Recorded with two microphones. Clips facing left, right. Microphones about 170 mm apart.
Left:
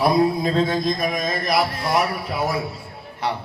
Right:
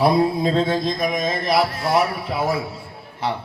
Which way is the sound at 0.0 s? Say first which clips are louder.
Right 1 dB; 25° right (ahead or behind).